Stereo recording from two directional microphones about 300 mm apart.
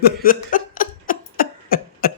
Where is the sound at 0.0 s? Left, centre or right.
Left.